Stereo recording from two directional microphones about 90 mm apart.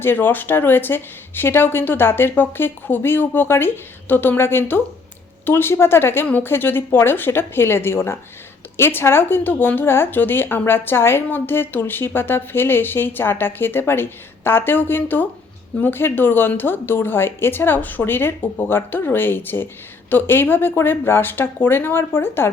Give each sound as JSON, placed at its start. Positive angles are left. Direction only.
{"t": 0.0, "sound": "a woman's voice", "side_deg": 25}